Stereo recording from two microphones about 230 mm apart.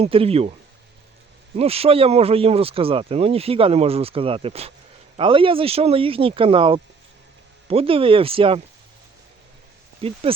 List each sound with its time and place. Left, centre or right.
0.0 s speech: right
1.5 s speech: right
10.0 s speech: right